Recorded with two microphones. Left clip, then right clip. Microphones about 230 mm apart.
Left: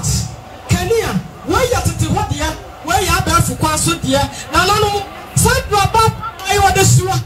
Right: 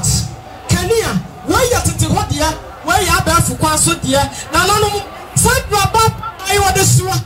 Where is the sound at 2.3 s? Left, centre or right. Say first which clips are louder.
Right 4 dB; right.